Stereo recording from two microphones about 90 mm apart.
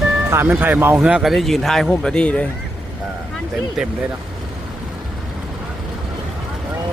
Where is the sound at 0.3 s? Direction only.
25° right (ahead or behind).